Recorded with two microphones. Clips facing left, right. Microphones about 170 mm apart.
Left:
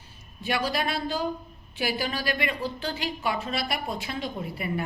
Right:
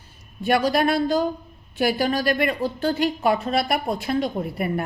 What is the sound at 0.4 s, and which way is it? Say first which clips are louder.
A woman's voice: right 8 dB; 50° right (ahead or behind).